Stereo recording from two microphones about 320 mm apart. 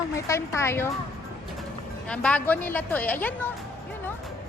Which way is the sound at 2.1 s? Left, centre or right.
Centre.